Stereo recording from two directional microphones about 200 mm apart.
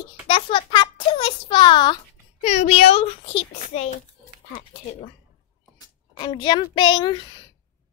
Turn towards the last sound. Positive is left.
turn(degrees=20)  # may be behind; listen again after turning